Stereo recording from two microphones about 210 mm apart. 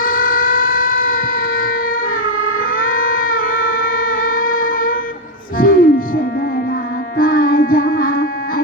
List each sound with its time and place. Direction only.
0.0 s siren: 40° left (ahead or behind)
2.6 s music: 40° left (ahead or behind)
7.2 s music: 45° left (ahead or behind)